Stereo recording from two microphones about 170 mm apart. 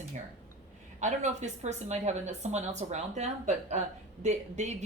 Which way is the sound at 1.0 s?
45° right (ahead or behind).